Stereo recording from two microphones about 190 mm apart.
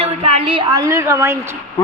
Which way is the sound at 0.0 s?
30° right (ahead or behind).